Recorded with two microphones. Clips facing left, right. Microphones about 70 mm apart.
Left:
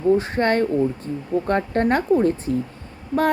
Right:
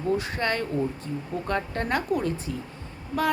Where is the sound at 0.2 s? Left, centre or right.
Left.